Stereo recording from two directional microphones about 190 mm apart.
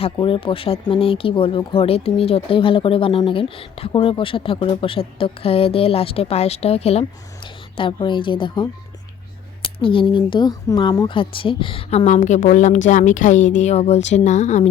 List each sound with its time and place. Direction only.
0.0 s speech: 30° left (ahead or behind)
9.6 s speech: 25° left (ahead or behind)